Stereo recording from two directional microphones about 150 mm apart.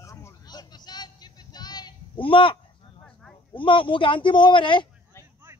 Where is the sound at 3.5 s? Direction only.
35° left (ahead or behind).